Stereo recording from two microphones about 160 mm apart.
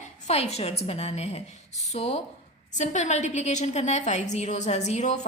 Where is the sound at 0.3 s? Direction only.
40° left (ahead or behind).